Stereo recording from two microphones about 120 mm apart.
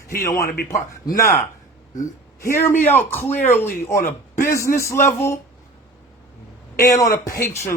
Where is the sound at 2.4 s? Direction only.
20° left (ahead or behind).